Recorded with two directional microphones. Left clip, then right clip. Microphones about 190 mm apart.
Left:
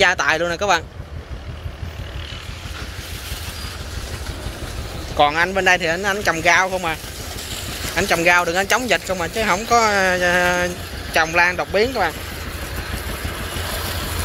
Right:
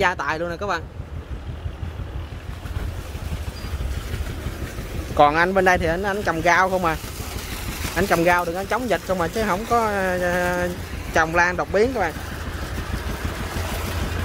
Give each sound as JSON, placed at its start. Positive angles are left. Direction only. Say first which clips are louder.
{"t": 0.0, "sound": "speech", "louder": "left 6 dB", "side_deg": -5}
{"t": 5.1, "sound": "speech", "louder": "even", "side_deg": -25}
{"t": 7.9, "sound": "speech", "louder": "left 3 dB", "side_deg": -5}
{"t": 9.5, "sound": "speech", "louder": "left 7 dB", "side_deg": -5}
{"t": 11.3, "sound": "speech", "louder": "left 3 dB", "side_deg": -15}